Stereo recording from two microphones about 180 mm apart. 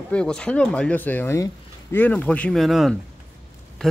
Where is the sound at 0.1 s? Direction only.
5° left (ahead or behind).